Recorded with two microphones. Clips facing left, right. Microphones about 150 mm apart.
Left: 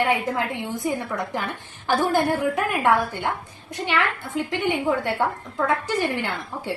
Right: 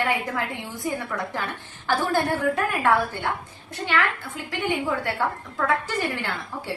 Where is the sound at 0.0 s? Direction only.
20° left (ahead or behind).